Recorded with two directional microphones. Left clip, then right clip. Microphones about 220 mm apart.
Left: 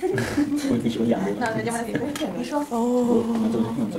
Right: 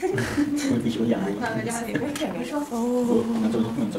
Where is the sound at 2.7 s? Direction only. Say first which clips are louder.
Left 2 dB; 30° right (ahead or behind).